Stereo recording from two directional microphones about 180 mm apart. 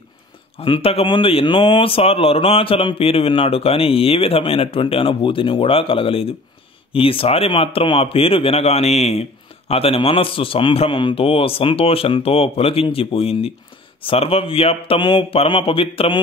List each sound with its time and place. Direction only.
0.6 s speech: 30° left (ahead or behind)